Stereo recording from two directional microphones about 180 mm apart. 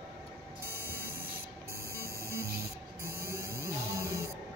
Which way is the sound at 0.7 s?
15° right (ahead or behind).